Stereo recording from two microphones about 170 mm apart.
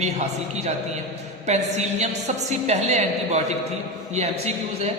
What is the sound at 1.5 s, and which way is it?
A woman's voice, 40° right (ahead or behind).